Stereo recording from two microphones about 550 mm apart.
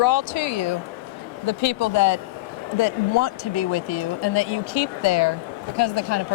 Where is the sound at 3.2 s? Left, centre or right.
Left.